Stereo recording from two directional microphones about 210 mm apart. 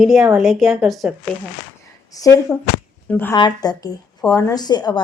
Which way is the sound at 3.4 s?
20° left (ahead or behind).